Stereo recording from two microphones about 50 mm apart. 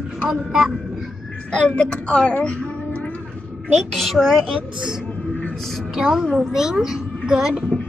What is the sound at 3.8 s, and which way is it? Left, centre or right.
Speech, centre.